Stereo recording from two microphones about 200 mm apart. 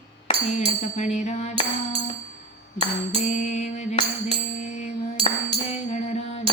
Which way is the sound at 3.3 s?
35° left (ahead or behind).